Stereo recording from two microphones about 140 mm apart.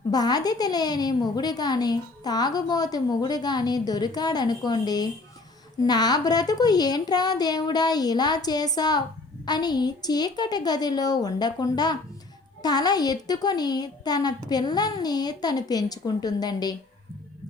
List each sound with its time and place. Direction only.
0.1 s a woman's voice: 30° left (ahead or behind)